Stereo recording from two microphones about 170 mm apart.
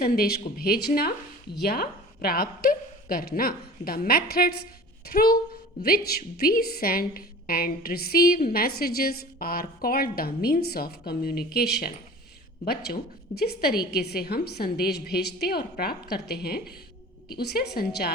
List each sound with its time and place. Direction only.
0.0 s a woman's voice: 65° left (ahead or behind)